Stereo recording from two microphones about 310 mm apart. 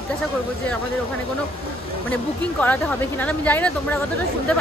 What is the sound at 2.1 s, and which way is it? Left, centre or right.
Speech, centre.